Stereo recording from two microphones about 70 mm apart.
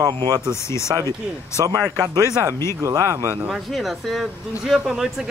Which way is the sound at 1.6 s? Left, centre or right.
Right.